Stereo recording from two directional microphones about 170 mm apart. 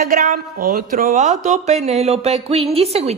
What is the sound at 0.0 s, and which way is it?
Speech, 50° right (ahead or behind).